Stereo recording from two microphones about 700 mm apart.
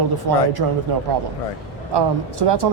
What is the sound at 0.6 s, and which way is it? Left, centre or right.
Speech, right.